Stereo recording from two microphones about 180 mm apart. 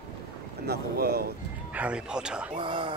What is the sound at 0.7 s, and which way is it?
Speech, 60° right (ahead or behind).